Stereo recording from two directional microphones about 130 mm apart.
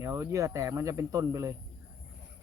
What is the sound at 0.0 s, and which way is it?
Speech, 25° right (ahead or behind).